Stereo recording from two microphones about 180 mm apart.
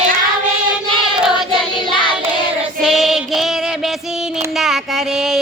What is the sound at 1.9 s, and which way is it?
Child singing, 25° left (ahead or behind).